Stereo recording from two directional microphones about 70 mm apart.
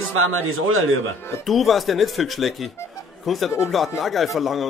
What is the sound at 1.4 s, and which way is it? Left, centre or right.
A man's voice, centre.